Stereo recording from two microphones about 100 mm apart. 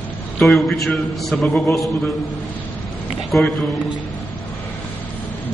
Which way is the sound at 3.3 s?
Centre (ahead or behind).